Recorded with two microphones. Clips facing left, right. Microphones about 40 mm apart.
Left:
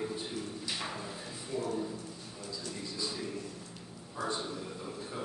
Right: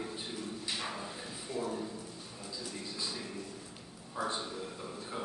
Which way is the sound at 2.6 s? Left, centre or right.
Centre.